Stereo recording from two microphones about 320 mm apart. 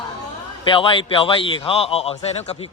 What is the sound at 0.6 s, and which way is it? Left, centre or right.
A man's voice, centre.